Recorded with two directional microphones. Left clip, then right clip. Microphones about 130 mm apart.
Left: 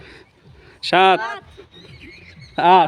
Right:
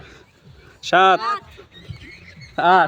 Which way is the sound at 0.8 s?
35° left (ahead or behind).